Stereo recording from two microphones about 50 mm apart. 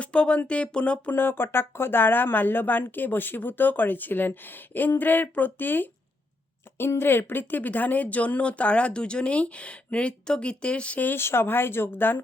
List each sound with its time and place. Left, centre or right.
0.0 s speech: left
1.1 s speech: left
6.7 s speech: left
11.2 s speech: left